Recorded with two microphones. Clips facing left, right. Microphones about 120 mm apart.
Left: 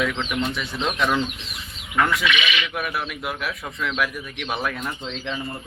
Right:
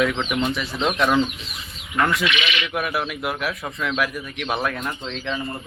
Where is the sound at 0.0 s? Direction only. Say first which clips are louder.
Right 3 dB; 5° right (ahead or behind).